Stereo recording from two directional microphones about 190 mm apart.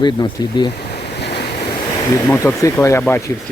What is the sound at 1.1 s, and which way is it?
Waves, 60° left (ahead or behind).